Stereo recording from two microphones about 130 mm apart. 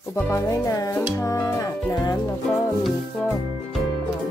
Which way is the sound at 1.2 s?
25° left (ahead or behind).